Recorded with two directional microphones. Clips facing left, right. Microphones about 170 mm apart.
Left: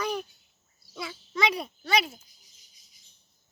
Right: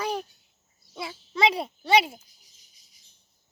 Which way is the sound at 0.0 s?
30° right (ahead or behind).